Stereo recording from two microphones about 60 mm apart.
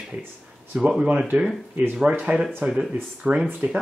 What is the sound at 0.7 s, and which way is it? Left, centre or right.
Speech, centre.